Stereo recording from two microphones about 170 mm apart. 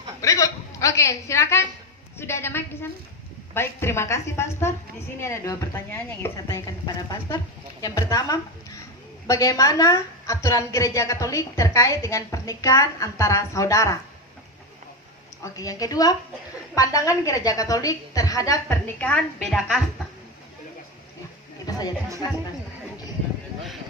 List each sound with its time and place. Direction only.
0.2 s a woman's voice: 20° left (ahead or behind)
15.5 s a woman's voice: 20° left (ahead or behind)
18.9 s a woman's voice: 5° left (ahead or behind)
21.7 s speech: 25° left (ahead or behind)